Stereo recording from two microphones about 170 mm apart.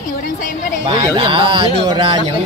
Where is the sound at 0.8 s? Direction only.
30° right (ahead or behind).